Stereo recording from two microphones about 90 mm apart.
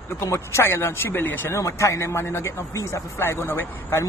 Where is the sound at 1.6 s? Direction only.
35° left (ahead or behind).